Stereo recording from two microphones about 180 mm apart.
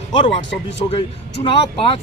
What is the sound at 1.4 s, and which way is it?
Speech, 30° left (ahead or behind).